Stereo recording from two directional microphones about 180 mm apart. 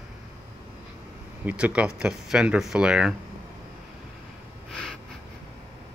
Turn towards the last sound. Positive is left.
turn(degrees=5)  # may be behind; listen again after turning